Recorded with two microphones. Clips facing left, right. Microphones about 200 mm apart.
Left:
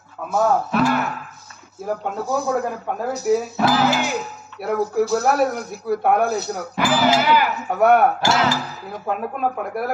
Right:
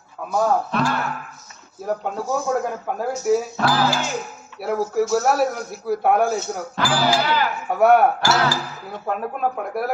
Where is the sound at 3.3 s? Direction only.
Centre (ahead or behind).